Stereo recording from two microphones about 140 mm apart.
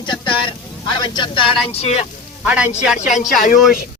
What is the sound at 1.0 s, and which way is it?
A woman's voice, 35° left (ahead or behind).